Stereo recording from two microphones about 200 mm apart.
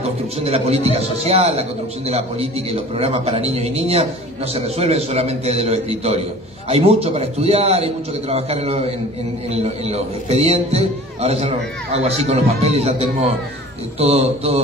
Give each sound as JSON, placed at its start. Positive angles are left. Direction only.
{"t": 0.4, "sound": "a man's voice", "side_deg": -30}